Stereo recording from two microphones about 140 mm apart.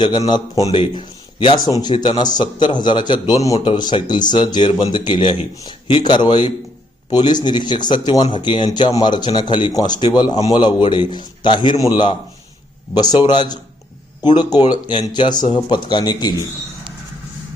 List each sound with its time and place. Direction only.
0.3 s speech: 30° left (ahead or behind)